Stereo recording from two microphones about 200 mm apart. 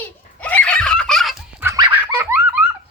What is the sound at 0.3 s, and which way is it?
Dog, 10° left (ahead or behind).